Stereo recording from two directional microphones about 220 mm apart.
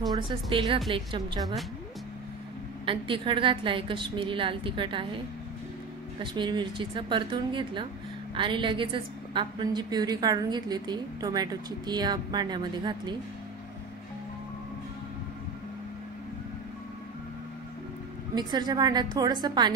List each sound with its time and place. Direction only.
0.1 s a woman's voice: 20° right (ahead or behind)
1.4 s speech: centre (ahead or behind)
2.8 s a woman's voice: 25° right (ahead or behind)
6.2 s a woman's voice: 20° right (ahead or behind)
18.3 s a woman's voice: 20° right (ahead or behind)